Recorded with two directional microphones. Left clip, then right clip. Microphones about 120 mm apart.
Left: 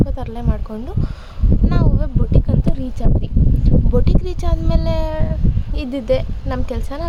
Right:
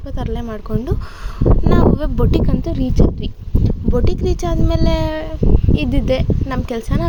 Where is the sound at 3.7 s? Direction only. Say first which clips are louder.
Right 1 dB; 10° right (ahead or behind).